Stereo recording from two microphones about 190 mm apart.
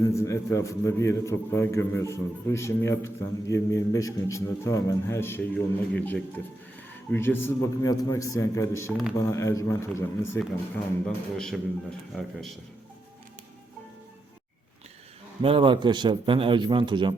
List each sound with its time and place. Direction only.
0.1 s a man's voice: 15° left (ahead or behind)
15.4 s a man's voice: 25° right (ahead or behind)